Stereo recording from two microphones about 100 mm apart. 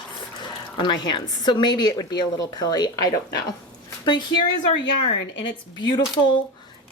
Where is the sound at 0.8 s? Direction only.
50° left (ahead or behind).